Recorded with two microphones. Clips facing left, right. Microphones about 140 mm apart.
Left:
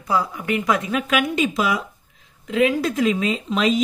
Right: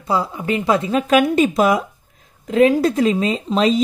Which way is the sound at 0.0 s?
25° right (ahead or behind).